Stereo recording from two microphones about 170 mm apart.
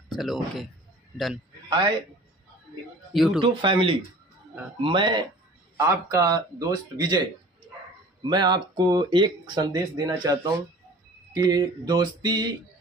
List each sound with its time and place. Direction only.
0.1 s a man's voice: centre (ahead or behind)
3.1 s speech: centre (ahead or behind)
3.3 s speech: 30° right (ahead or behind)
8.2 s speech: 25° right (ahead or behind)